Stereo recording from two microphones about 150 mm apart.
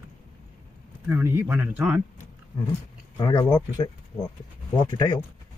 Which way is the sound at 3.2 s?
25° left (ahead or behind).